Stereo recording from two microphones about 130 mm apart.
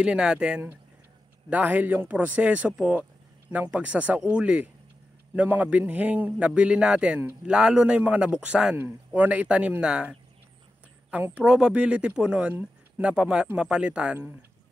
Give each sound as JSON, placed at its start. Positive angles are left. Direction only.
{"t": 0.0, "sound": "speech", "side_deg": -5}